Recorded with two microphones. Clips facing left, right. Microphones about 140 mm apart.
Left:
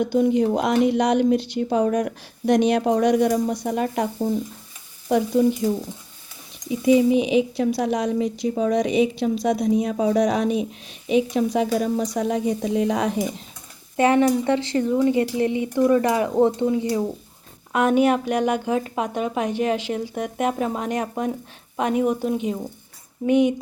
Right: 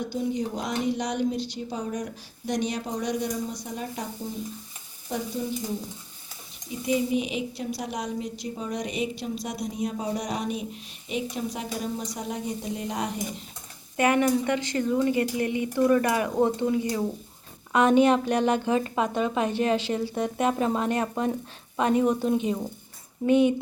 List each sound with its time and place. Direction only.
0.0 s speech: 65° left (ahead or behind)
5.0 s stir: 75° left (ahead or behind)
7.2 s a woman's voice: 90° left
13.9 s a woman's voice: 25° left (ahead or behind)